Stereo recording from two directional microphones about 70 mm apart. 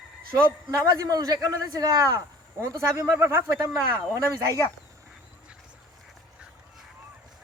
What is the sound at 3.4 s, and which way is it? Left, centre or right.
Speech, right.